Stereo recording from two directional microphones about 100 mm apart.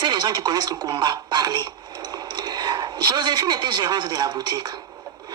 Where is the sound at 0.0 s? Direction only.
45° right (ahead or behind).